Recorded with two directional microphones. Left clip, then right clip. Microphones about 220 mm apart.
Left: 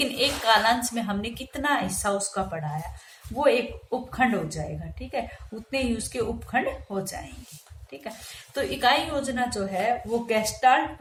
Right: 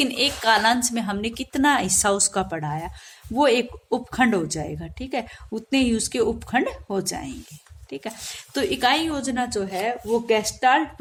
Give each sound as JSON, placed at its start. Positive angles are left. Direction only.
{"t": 0.0, "sound": "a woman's voice", "side_deg": -50}
{"t": 8.5, "sound": "a woman's voice", "side_deg": -50}